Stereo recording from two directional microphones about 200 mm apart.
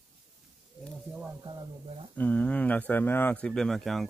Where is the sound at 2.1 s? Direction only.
5° left (ahead or behind).